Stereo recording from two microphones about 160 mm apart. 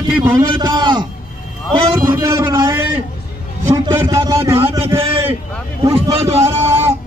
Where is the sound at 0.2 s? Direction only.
20° right (ahead or behind).